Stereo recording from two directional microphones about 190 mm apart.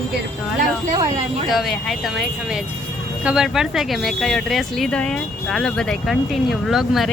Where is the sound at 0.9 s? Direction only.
20° right (ahead or behind).